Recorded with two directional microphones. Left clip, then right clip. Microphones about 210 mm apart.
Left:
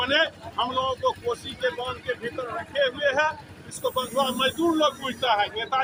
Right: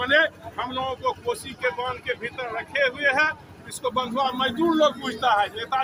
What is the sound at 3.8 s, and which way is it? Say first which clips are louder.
Speech: right 1 dB; 35° right (ahead or behind).